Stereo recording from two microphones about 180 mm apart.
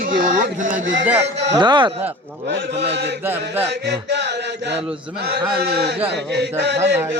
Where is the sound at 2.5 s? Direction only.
75° right (ahead or behind).